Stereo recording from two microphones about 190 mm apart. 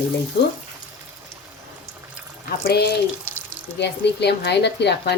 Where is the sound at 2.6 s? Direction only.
55° left (ahead or behind).